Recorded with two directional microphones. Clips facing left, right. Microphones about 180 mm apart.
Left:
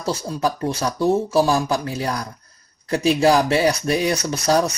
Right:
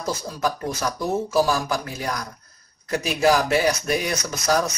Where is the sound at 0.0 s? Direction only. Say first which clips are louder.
Left 3 dB; 30° left (ahead or behind).